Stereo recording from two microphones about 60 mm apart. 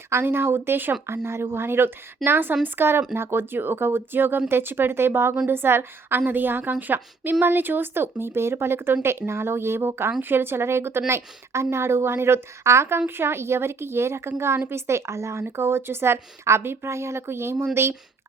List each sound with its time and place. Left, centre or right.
0.1 s a woman's voice: right